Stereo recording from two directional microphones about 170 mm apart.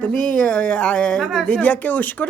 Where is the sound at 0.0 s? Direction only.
10° left (ahead or behind).